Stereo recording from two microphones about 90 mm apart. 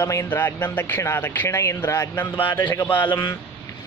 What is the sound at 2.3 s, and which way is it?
Speech, 60° left (ahead or behind).